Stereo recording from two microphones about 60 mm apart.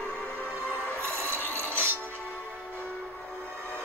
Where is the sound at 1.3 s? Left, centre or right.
Right.